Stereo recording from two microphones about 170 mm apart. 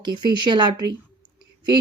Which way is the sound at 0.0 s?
25° right (ahead or behind).